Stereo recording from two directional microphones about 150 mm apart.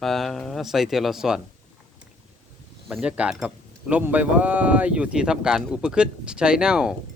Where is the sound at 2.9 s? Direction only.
10° right (ahead or behind).